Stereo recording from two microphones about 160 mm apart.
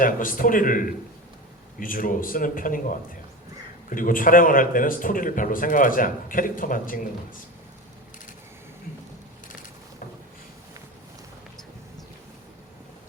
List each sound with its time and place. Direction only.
0.0 s a man's voice: 60° left (ahead or behind)